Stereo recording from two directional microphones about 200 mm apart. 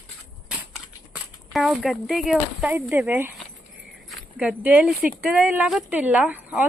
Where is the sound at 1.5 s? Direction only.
Centre (ahead or behind).